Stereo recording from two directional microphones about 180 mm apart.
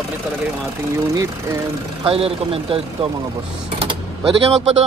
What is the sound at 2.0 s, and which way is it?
Speech, 30° right (ahead or behind).